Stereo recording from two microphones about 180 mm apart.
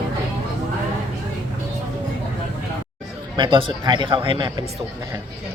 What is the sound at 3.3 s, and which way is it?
Speech, 25° right (ahead or behind).